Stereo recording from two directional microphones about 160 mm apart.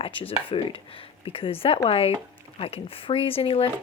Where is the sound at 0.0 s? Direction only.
35° left (ahead or behind).